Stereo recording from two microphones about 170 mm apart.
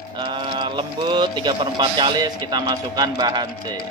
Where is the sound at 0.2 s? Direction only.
25° right (ahead or behind).